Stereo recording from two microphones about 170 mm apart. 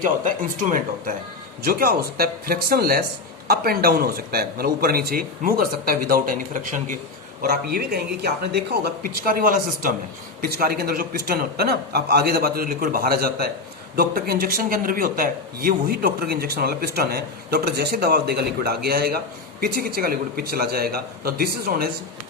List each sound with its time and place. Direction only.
0.0 s speech: 50° right (ahead or behind)
7.4 s speech: 65° right (ahead or behind)